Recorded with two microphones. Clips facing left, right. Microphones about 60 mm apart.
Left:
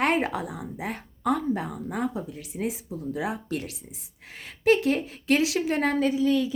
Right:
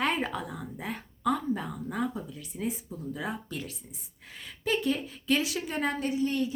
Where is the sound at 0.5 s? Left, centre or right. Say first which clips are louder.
Left 3 dB; left.